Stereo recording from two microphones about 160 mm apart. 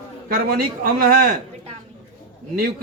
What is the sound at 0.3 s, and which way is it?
A man's voice, 70° right (ahead or behind).